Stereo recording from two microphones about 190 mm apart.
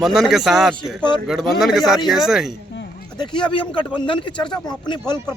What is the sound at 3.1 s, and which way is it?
Speech, 25° left (ahead or behind).